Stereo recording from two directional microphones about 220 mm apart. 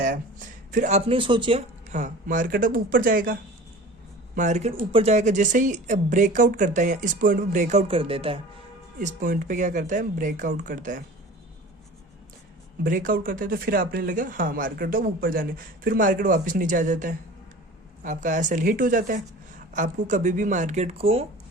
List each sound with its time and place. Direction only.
0.0 s speech: 35° right (ahead or behind)
4.4 s speech: 30° right (ahead or behind)
9.0 s speech: 35° right (ahead or behind)
12.8 s speech: 40° right (ahead or behind)